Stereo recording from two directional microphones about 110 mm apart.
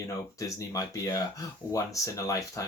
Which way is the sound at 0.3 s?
30° left (ahead or behind).